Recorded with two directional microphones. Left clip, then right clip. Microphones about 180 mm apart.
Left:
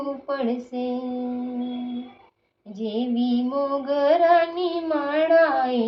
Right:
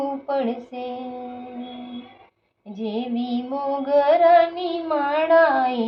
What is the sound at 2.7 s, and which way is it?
Female singing, 5° right (ahead or behind).